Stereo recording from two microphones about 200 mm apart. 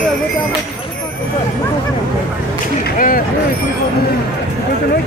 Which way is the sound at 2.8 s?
45° left (ahead or behind).